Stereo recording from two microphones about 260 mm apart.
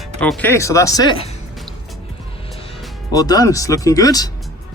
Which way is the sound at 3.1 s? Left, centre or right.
Centre.